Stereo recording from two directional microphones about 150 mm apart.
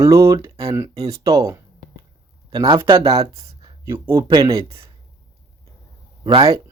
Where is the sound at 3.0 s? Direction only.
40° right (ahead or behind).